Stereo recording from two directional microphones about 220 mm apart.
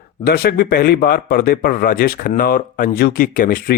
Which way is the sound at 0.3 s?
45° left (ahead or behind).